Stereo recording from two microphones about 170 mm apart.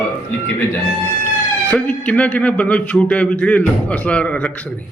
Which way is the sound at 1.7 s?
10° left (ahead or behind).